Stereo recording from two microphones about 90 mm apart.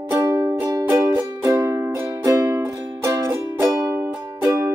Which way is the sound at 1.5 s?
30° right (ahead or behind).